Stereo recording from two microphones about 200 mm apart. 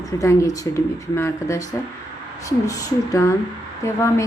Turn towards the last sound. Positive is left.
turn(degrees=15)  # may be behind; listen again after turning